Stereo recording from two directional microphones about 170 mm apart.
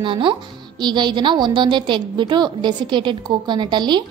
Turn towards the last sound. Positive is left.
turn(degrees=-25)  # may be behind; listen again after turning